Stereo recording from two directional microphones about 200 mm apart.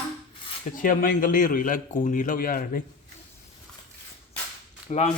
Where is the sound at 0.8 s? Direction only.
45° left (ahead or behind).